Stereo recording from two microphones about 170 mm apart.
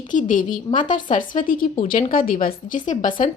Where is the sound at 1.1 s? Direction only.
50° left (ahead or behind).